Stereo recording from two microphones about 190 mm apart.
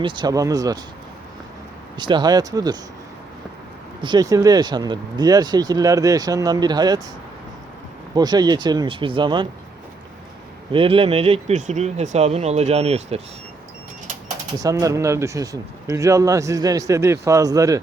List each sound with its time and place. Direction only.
0.0 s speech: 25° right (ahead or behind)
2.0 s speech: 25° right (ahead or behind)
4.0 s speech: 20° right (ahead or behind)
8.1 s speech: 20° right (ahead or behind)
10.7 s speech: 30° right (ahead or behind)
14.6 s a man's voice: 15° right (ahead or behind)